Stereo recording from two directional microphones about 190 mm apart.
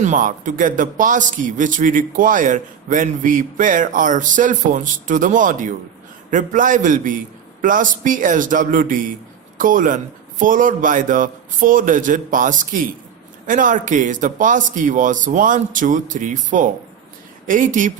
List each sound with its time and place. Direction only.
0.0 s a man's voice: 45° right (ahead or behind)